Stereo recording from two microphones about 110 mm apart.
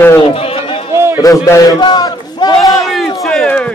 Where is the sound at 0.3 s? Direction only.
60° left (ahead or behind).